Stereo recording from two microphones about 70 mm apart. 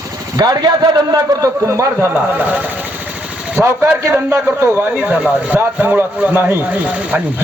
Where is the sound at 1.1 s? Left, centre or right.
Right.